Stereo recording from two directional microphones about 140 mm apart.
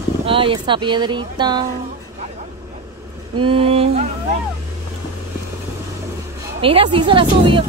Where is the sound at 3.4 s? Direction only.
40° right (ahead or behind).